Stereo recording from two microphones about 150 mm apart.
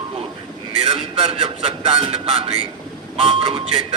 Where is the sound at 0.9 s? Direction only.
40° right (ahead or behind).